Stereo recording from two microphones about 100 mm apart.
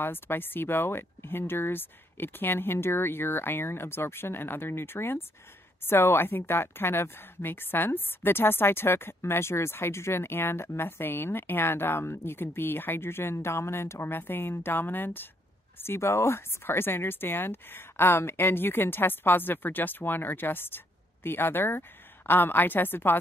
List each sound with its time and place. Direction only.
0.0 s speech: 20° left (ahead or behind)